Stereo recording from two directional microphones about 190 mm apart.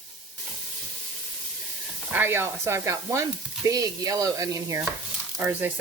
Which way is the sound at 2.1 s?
10° right (ahead or behind).